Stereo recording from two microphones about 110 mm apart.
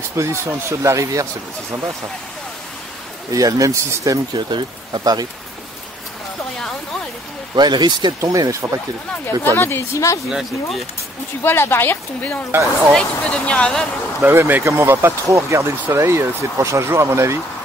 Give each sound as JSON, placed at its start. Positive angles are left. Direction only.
{"t": 0.2, "sound": "speech", "side_deg": -25}
{"t": 3.3, "sound": "speech", "side_deg": -30}
{"t": 4.4, "sound": "speech", "side_deg": -45}
{"t": 7.5, "sound": "speech", "side_deg": -40}
{"t": 8.2, "sound": "speech", "side_deg": -30}
{"t": 9.2, "sound": "speech", "side_deg": 20}
{"t": 11.4, "sound": "speech", "side_deg": 20}
{"t": 12.4, "sound": "speech", "side_deg": -20}
{"t": 12.9, "sound": "speech", "side_deg": 10}
{"t": 14.2, "sound": "speech", "side_deg": -20}